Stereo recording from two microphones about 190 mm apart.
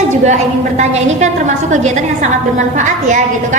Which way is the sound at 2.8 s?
40° right (ahead or behind).